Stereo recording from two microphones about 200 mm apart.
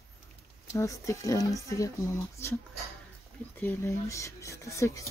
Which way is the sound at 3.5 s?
10° left (ahead or behind).